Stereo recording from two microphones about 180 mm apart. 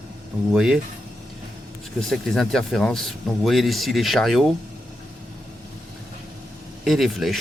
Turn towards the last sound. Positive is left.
turn(degrees=0)  # may be behind; listen again after turning